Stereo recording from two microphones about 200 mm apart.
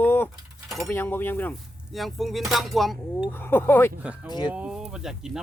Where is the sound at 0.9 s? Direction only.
10° left (ahead or behind).